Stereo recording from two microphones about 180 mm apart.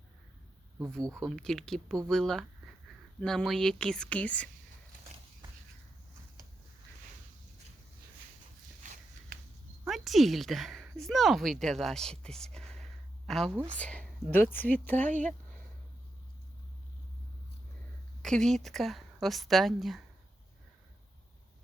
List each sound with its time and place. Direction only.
0.9 s speech: 5° left (ahead or behind)
8.8 s a sound: 45° right (ahead or behind)
9.8 s a woman's voice: centre (ahead or behind)
18.2 s speech: 5° left (ahead or behind)